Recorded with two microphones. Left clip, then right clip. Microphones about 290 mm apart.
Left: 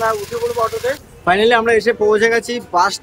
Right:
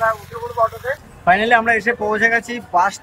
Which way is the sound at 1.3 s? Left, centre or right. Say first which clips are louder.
Left 1 dB; centre.